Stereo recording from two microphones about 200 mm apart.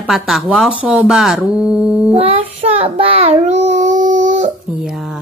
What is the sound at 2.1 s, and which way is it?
Child singing, 30° right (ahead or behind).